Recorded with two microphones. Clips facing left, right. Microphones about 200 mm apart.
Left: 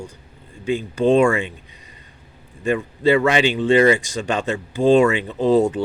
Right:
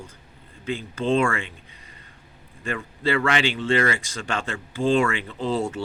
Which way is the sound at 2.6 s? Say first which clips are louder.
Left 9 dB; 15° left (ahead or behind).